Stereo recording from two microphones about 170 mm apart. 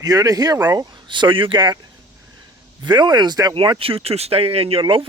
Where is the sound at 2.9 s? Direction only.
25° right (ahead or behind).